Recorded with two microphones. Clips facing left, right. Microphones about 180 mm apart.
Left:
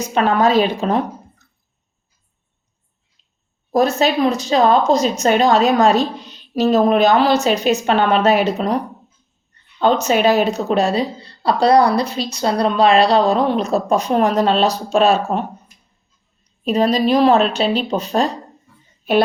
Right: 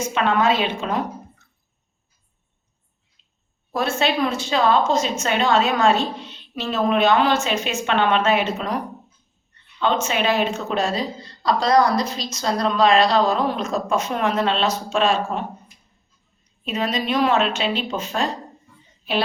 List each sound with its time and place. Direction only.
0.0 s speech: 40° left (ahead or behind)
3.7 s speech: 40° left (ahead or behind)